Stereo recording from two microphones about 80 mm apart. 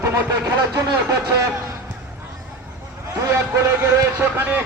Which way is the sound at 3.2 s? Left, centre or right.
Right.